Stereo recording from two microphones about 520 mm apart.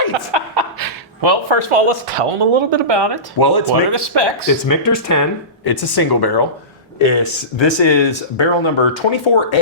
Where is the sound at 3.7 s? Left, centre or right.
Right.